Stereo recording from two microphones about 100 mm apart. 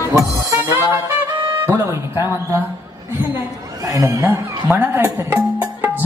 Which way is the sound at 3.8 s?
35° right (ahead or behind).